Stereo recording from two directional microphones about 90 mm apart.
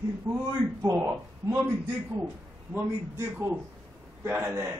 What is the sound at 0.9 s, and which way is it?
Speech, 25° right (ahead or behind).